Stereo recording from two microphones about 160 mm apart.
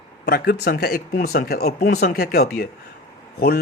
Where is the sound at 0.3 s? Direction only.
80° left.